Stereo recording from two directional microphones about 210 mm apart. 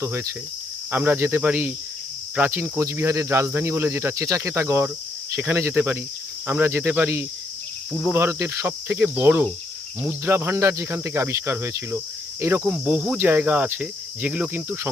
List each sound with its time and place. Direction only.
0.9 s cricket: 10° right (ahead or behind)